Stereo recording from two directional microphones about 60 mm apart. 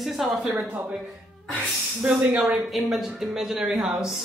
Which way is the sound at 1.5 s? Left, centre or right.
Right.